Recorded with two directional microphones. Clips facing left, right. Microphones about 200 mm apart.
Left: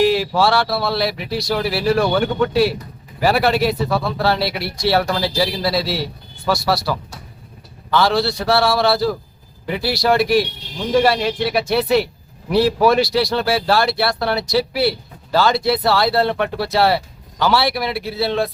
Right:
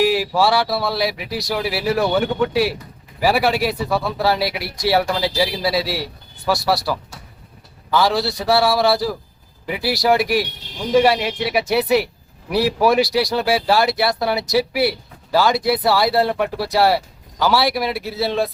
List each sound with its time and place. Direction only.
0.0 s speech: 5° right (ahead or behind)